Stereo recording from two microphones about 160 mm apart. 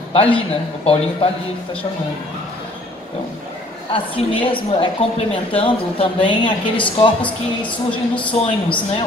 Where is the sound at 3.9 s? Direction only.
35° left (ahead or behind).